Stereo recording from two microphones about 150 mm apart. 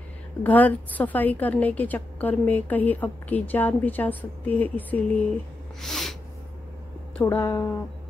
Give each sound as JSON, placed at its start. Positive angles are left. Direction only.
{"t": 0.4, "sound": "a woman's voice", "side_deg": 10}
{"t": 5.8, "sound": "snort", "side_deg": 0}
{"t": 7.2, "sound": "a woman's voice", "side_deg": 15}